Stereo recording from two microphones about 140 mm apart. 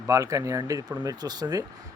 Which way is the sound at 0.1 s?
25° right (ahead or behind).